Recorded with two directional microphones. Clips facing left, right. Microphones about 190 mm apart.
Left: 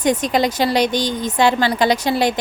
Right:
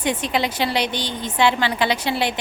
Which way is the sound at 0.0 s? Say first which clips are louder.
Left 5 dB; 40° left (ahead or behind).